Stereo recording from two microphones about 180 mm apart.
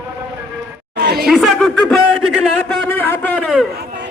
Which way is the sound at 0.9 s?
60° right (ahead or behind).